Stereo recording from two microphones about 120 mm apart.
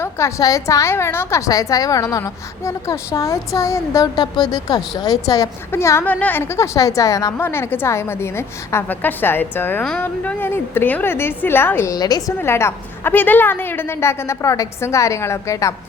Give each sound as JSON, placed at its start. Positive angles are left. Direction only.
{"t": 0.0, "sound": "a woman's voice", "side_deg": 25}
{"t": 11.9, "sound": "a woman's voice", "side_deg": 30}
{"t": 12.4, "sound": "a woman's voice", "side_deg": 20}